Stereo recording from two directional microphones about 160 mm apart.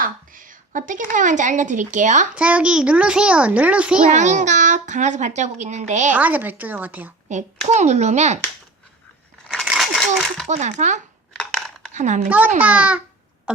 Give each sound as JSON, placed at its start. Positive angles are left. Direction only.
{"t": 0.0, "sound": "a sound", "side_deg": -55}
{"t": 1.1, "sound": "a child's voice", "side_deg": -50}
{"t": 2.3, "sound": "a child's voice", "side_deg": -10}
{"t": 4.1, "sound": "a child's voice", "side_deg": -50}
{"t": 6.1, "sound": "a child's voice", "side_deg": -10}
{"t": 7.3, "sound": "a child's voice", "side_deg": -45}
{"t": 9.5, "sound": "a sound", "side_deg": 0}
{"t": 10.5, "sound": "a child's voice", "side_deg": -45}
{"t": 11.3, "sound": "a sound", "side_deg": 5}
{"t": 11.9, "sound": "a child's voice", "side_deg": -50}
{"t": 12.5, "sound": "a child's voice", "side_deg": -10}